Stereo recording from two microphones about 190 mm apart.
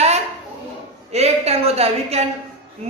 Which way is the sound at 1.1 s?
35° right (ahead or behind).